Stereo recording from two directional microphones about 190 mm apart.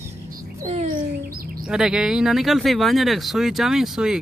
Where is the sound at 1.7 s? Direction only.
5° right (ahead or behind).